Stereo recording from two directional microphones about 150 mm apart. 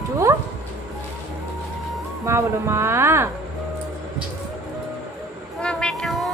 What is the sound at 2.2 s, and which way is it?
Speech, 20° right (ahead or behind).